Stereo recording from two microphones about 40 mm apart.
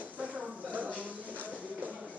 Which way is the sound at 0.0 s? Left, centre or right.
Right.